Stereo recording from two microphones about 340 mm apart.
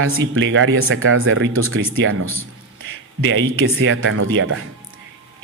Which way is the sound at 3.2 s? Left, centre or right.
Right.